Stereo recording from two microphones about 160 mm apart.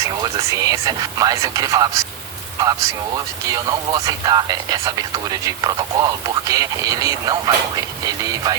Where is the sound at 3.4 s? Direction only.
25° right (ahead or behind).